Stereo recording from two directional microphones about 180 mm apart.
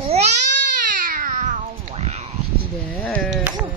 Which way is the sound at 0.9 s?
50° right (ahead or behind).